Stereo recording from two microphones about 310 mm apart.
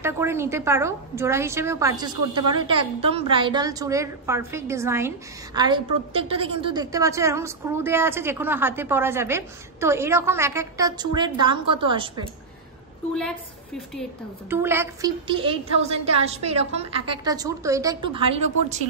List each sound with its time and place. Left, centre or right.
0.0 s a woman's voice: centre
14.5 s a woman's voice: centre